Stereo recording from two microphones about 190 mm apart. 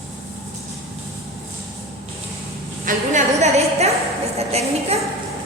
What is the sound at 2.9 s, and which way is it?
Music, 40° right (ahead or behind).